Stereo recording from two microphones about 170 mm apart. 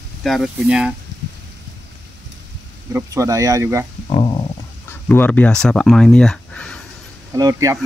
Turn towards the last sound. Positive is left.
turn(degrees=-20)  # may be behind; listen again after turning